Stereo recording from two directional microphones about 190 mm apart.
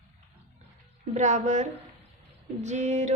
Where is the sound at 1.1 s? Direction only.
40° right (ahead or behind).